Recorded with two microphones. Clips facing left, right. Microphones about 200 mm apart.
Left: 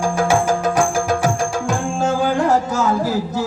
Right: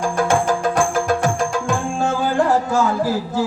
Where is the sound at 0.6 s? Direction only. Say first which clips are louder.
Left 1 dB; 40° left (ahead or behind).